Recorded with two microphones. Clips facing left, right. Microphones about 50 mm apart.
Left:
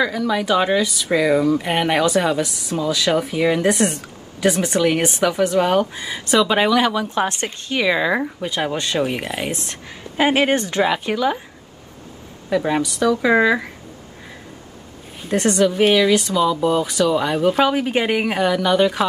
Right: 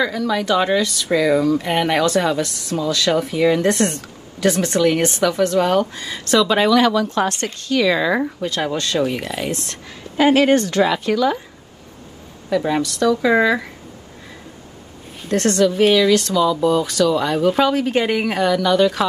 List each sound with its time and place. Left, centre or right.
0.0 s speech: centre
12.4 s speech: centre
15.2 s speech: centre